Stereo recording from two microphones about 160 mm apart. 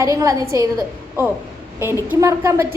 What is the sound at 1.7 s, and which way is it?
Speech, 15° right (ahead or behind).